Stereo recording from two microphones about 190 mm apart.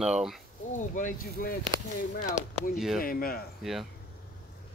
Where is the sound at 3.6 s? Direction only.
Centre (ahead or behind).